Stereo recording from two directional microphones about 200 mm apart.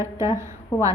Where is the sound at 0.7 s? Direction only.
20° left (ahead or behind).